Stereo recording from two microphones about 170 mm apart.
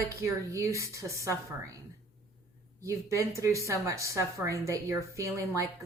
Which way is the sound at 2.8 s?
15° right (ahead or behind).